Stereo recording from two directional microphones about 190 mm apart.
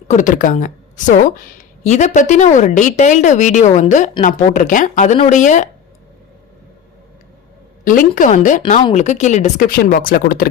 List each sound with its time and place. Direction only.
0.1 s a woman's voice: 40° left (ahead or behind)
7.9 s a woman's voice: 45° left (ahead or behind)